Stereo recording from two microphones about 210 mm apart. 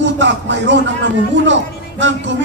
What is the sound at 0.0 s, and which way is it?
Speech, 60° right (ahead or behind).